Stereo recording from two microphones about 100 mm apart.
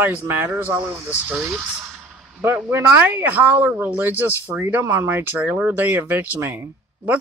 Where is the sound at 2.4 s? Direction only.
25° right (ahead or behind).